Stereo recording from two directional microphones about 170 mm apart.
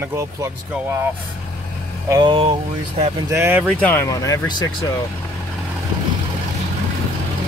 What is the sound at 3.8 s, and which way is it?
Speech, 10° left (ahead or behind).